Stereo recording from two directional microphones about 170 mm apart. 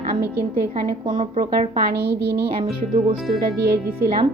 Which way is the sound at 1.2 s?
55° right (ahead or behind).